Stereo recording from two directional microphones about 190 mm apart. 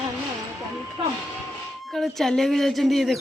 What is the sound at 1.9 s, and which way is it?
Speech, centre (ahead or behind).